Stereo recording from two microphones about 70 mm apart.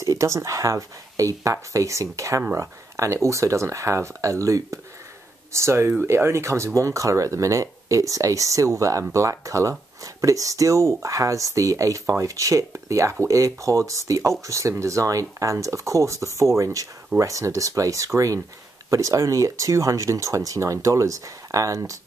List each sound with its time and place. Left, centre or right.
0.0 s speech: right